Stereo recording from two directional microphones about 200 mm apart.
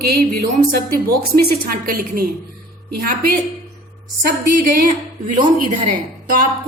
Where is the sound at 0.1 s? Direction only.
45° right (ahead or behind).